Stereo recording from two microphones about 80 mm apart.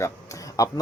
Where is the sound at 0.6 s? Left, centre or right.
Left.